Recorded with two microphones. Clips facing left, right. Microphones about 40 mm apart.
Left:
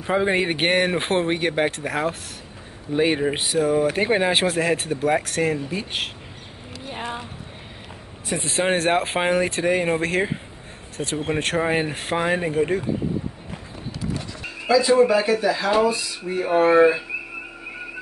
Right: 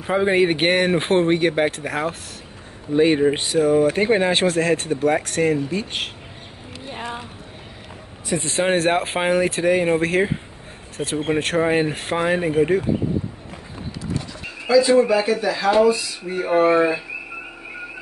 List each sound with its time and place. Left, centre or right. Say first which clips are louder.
0.0 s speech: right 3 dB; centre
8.4 s speech: right 2 dB; centre
11.0 s speech: right 2 dB; centre
11.3 s speech: right 3 dB; centre
14.7 s speech: right 1 dB; centre